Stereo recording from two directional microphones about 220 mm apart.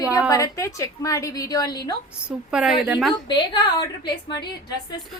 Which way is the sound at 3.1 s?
20° left (ahead or behind).